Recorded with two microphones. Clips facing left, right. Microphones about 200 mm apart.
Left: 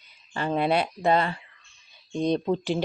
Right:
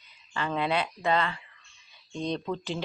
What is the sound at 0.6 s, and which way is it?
Speech, 40° left (ahead or behind).